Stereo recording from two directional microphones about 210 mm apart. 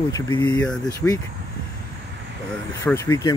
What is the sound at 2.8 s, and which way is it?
Speech, 10° left (ahead or behind).